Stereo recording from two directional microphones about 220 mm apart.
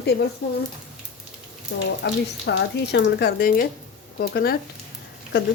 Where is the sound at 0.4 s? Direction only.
45° left (ahead or behind).